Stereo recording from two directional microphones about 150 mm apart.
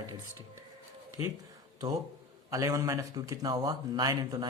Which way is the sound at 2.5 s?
20° right (ahead or behind).